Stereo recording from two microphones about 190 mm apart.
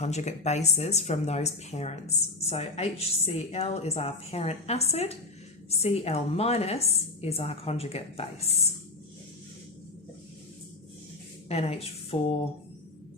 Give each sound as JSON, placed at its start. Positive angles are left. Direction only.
{"t": 0.0, "sound": "speech", "side_deg": 35}
{"t": 11.4, "sound": "speech", "side_deg": 35}